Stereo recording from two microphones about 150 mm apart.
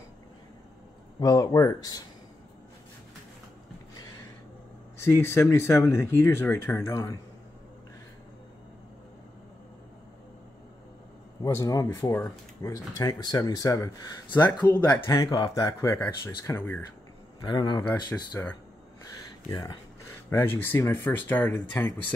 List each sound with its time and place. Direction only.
1.2 s speech: 25° left (ahead or behind)
5.0 s speech: 15° left (ahead or behind)
11.4 s speech: 25° left (ahead or behind)
16.2 s speech: 30° left (ahead or behind)
16.5 s speech: 10° left (ahead or behind)
17.4 s speech: 30° left (ahead or behind)
18.1 s speech: 10° left (ahead or behind)
19.5 s speech: 25° left (ahead or behind)